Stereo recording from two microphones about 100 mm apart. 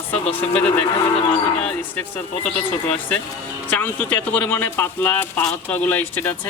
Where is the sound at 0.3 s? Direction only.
15° left (ahead or behind).